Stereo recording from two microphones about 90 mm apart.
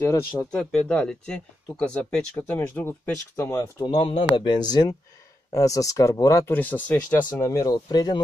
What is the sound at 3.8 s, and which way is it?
Speech, 70° left (ahead or behind).